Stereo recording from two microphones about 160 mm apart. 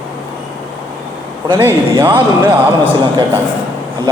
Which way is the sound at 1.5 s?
15° right (ahead or behind).